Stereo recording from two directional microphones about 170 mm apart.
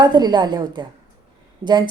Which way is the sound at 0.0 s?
25° right (ahead or behind).